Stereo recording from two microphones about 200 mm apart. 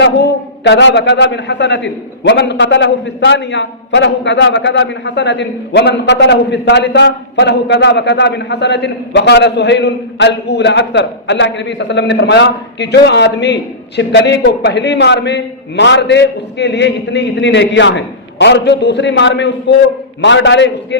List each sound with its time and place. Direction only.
0.0 s a man's voice: 60° left (ahead or behind)